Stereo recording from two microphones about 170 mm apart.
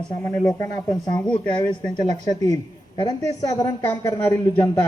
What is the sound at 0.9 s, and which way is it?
Speech, 25° left (ahead or behind).